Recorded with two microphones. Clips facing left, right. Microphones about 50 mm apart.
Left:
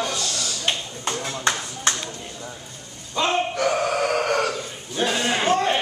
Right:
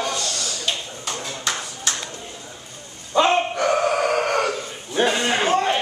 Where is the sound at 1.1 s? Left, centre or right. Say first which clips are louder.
Left 3 dB; left.